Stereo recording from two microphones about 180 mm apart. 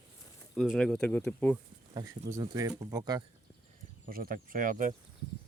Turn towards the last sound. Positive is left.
turn(degrees=-50)  # may be behind; listen again after turning